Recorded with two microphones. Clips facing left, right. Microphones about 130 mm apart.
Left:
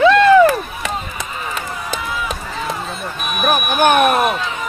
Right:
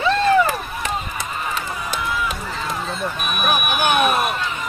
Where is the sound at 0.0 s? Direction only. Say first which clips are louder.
Left 7 dB; 80° left.